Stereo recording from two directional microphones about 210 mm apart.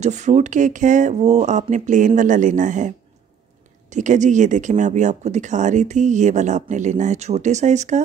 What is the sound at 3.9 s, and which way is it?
Speech, 35° right (ahead or behind).